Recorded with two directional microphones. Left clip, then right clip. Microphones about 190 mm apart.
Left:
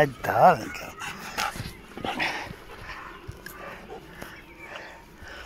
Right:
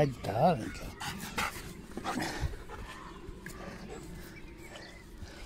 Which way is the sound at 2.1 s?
25° right (ahead or behind).